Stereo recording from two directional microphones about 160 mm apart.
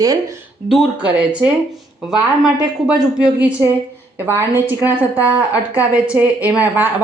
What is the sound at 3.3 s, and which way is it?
A woman's voice, 10° right (ahead or behind).